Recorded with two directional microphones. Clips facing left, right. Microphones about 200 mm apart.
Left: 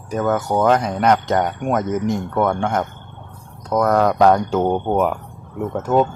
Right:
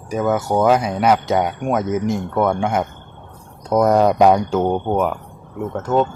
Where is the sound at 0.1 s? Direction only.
5° right (ahead or behind).